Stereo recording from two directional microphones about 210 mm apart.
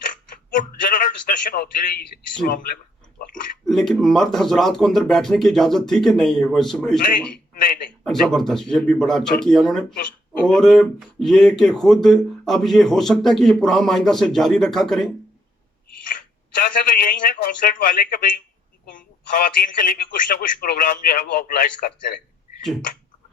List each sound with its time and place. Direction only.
0.5 s a man's voice: 40° left (ahead or behind)
3.7 s speech: centre (ahead or behind)
7.5 s a man's voice: 40° left (ahead or behind)
7.9 s speech: centre (ahead or behind)
16.6 s speech: 40° left (ahead or behind)